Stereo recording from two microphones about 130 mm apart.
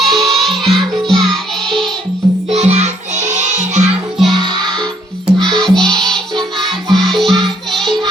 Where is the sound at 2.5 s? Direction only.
55° right (ahead or behind).